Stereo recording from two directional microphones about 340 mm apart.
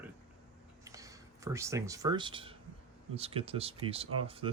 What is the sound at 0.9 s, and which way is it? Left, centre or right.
Speech, centre.